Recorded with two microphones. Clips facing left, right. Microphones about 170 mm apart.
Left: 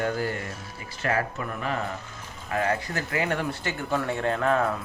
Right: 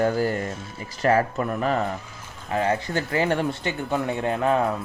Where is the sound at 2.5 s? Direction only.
25° right (ahead or behind).